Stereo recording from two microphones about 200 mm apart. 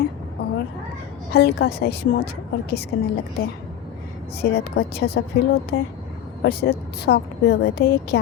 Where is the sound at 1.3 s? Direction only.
55° left (ahead or behind).